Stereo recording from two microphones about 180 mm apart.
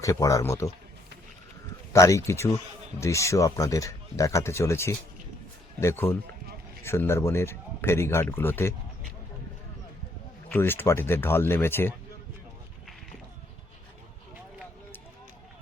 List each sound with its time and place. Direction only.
0.0 s speech: 20° left (ahead or behind)
1.9 s speech: 15° left (ahead or behind)
10.5 s speech: 10° left (ahead or behind)